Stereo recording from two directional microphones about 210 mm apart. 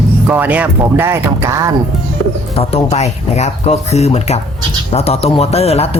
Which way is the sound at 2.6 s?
30° left (ahead or behind).